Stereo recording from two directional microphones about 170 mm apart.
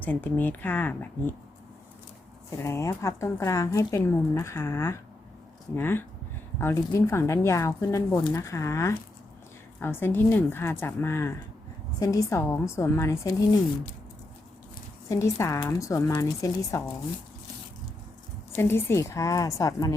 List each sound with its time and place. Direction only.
0.0 s speech: 10° left (ahead or behind)
2.6 s speech: 15° left (ahead or behind)
15.1 s speech: 15° left (ahead or behind)
18.5 s speech: 15° left (ahead or behind)